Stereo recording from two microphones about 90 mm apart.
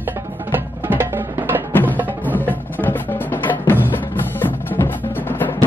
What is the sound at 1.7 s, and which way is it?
Music, 20° left (ahead or behind).